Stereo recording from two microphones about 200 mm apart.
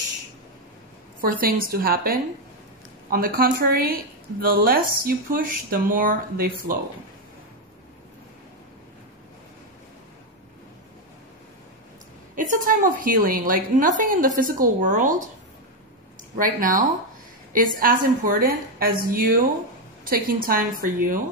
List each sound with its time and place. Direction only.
1.4 s speech: 45° right (ahead or behind)
12.4 s speech: 40° right (ahead or behind)
16.3 s speech: 45° right (ahead or behind)